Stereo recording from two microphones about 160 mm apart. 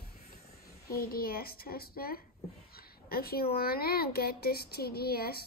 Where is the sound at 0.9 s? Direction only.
70° left (ahead or behind).